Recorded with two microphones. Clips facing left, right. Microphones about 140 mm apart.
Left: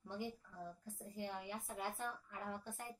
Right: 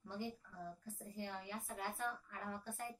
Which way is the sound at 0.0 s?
15° left (ahead or behind).